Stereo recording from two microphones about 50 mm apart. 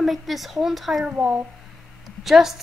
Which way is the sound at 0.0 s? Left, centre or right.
Centre.